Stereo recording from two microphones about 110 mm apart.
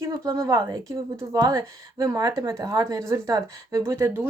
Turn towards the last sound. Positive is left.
turn(degrees=-25)  # may be behind; listen again after turning